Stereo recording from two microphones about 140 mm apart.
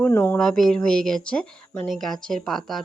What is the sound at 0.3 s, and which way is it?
Speech, 5° left (ahead or behind).